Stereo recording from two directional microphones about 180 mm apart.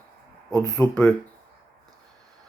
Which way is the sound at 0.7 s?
5° left (ahead or behind).